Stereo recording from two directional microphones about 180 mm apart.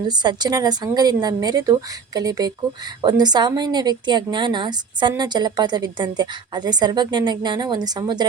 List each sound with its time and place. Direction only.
0.1 s a woman's voice: 25° right (ahead or behind)